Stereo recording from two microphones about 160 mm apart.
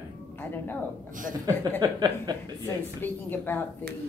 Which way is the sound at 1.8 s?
25° right (ahead or behind).